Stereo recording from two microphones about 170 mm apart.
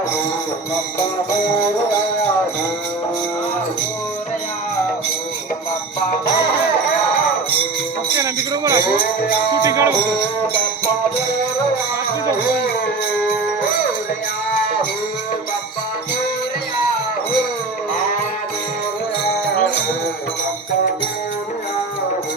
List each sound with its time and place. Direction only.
8.2 s music: 20° right (ahead or behind)